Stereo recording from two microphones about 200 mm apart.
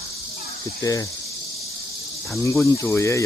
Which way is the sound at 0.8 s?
15° left (ahead or behind).